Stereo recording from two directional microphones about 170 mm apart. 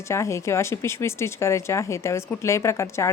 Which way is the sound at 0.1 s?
15° left (ahead or behind).